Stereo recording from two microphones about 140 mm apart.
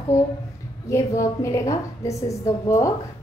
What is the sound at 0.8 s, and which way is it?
A woman's voice, 20° left (ahead or behind).